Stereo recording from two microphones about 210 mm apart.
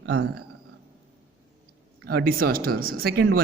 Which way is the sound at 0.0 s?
75° right (ahead or behind).